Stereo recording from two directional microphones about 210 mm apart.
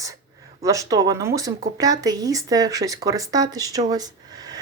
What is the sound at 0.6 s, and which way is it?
Speech, 15° right (ahead or behind).